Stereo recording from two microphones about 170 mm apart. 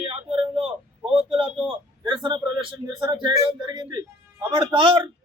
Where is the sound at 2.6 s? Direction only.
25° right (ahead or behind).